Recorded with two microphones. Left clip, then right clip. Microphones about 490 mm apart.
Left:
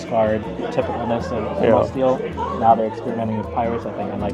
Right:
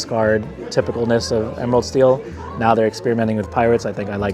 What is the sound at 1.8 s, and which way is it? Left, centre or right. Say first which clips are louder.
Speech: right 4 dB; right.